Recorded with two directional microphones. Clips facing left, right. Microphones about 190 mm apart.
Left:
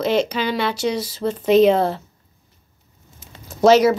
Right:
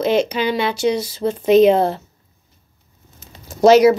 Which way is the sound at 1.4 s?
5° right (ahead or behind).